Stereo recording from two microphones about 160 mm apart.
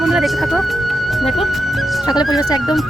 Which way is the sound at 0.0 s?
Centre (ahead or behind).